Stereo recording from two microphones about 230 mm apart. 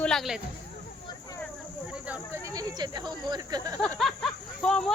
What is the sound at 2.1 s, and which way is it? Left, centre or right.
Speech, centre.